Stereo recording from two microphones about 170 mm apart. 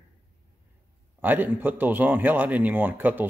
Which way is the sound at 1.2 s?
10° right (ahead or behind).